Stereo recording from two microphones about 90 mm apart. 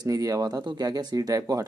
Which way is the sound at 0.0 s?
40° right (ahead or behind).